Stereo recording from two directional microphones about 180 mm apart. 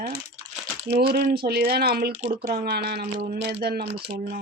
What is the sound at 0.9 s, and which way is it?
Speech, 60° right (ahead or behind).